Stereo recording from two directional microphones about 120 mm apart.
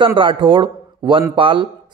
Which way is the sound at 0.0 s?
45° right (ahead or behind).